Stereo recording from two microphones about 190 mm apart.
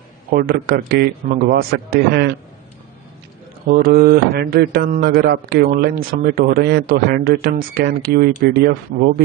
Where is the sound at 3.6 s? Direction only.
45° right (ahead or behind).